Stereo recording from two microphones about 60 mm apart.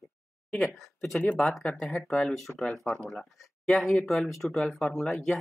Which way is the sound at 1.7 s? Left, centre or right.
Centre.